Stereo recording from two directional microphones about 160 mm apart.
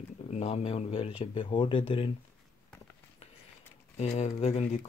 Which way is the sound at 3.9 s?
45° left (ahead or behind).